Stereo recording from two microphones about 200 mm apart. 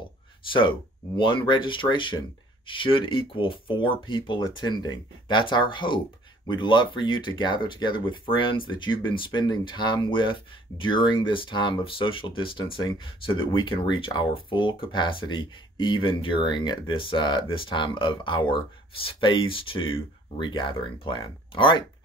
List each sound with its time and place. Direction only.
0.5 s speech: 25° left (ahead or behind)